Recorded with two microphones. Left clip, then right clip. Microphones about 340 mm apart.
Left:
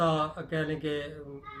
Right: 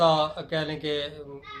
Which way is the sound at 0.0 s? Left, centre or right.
Centre.